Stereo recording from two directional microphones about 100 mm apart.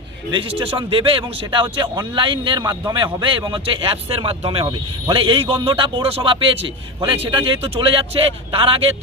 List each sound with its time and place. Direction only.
0.3 s speech: 60° right (ahead or behind)